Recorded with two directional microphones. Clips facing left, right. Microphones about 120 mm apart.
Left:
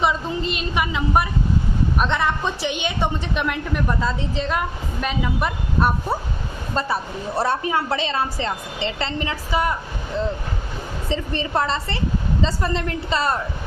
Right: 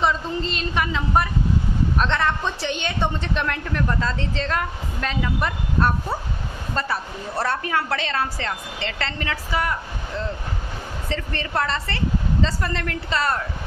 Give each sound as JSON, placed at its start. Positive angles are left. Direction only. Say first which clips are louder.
{"t": 0.0, "sound": "a woman's voice", "louder": "left 1 dB", "side_deg": 10}